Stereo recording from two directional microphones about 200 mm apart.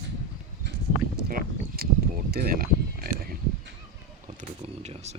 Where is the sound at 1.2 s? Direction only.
45° right (ahead or behind).